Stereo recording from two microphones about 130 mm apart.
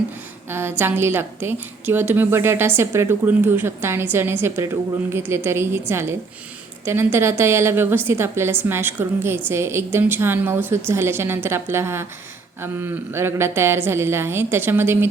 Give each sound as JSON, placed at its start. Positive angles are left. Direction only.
{"t": 0.5, "sound": "a woman's voice", "side_deg": -15}